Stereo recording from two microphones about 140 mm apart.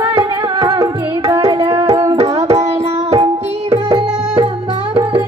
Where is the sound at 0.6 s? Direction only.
25° right (ahead or behind).